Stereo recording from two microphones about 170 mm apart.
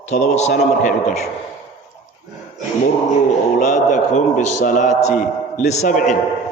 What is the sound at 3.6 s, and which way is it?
A man's voice, 45° left (ahead or behind).